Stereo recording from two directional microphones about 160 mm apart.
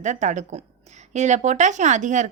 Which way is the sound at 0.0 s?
50° right (ahead or behind).